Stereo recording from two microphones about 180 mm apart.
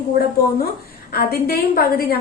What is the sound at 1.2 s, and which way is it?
A woman's voice, 55° left (ahead or behind).